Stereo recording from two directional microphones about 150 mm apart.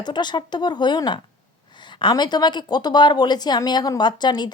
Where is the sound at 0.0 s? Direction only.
30° left (ahead or behind).